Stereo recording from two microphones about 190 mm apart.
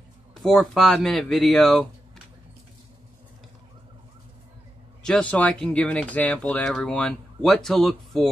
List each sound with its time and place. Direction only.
0.3 s speech: 5° left (ahead or behind)
5.0 s speech: 5° left (ahead or behind)